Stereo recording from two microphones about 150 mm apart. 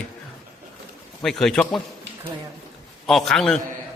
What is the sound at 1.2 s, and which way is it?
Speech, centre (ahead or behind).